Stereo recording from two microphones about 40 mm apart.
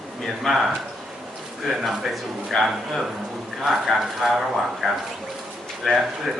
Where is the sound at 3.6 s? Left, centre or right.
Centre.